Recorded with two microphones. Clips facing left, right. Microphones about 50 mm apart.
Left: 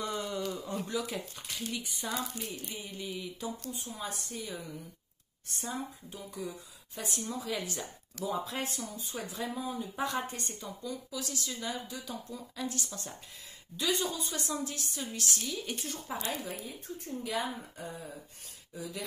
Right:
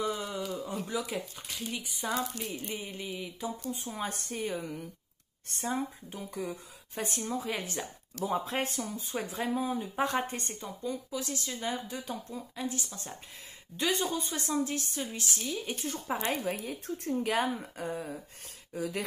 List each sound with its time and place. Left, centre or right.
0.0 s a sound: centre
0.8 s speech: centre
2.1 s speech: centre
2.7 s speech: right
3.0 s speech: centre
4.0 s a woman's voice: right
5.6 s speech: right
13.7 s speech: right
15.1 s speech: right
16.4 s speech: right
17.7 s a woman's voice: right